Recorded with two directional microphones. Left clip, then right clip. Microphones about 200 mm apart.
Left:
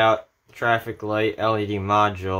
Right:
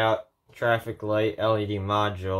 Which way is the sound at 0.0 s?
15° left (ahead or behind).